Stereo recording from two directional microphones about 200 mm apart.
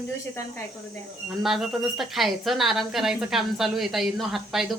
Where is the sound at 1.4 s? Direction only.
Centre (ahead or behind).